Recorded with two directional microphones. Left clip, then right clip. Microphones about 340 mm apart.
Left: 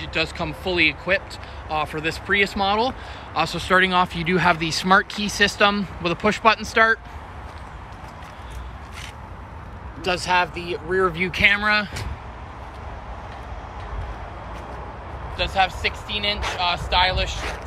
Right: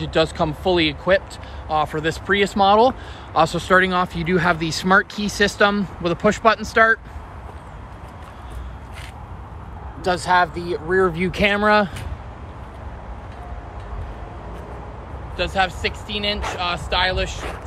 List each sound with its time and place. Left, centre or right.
0.0 s speech: centre
10.2 s speech: centre
11.1 s speech: centre
15.3 s speech: centre